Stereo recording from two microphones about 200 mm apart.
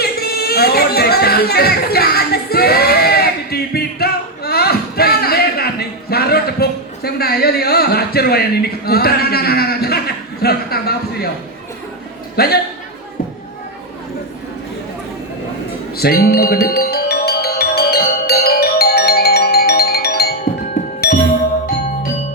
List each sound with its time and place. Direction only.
0.0 s music: 50° left (ahead or behind)
10.4 s a sound: 50° left (ahead or behind)
12.4 s a man's voice: 50° left (ahead or behind)
16.0 s music: 50° left (ahead or behind)